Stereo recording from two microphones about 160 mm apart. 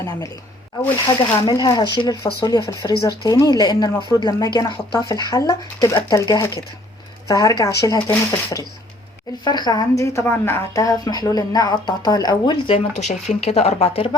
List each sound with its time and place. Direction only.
1.0 s speech: 30° left (ahead or behind)